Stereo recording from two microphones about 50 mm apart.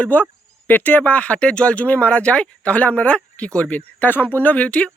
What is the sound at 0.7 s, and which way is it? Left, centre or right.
Speech, left.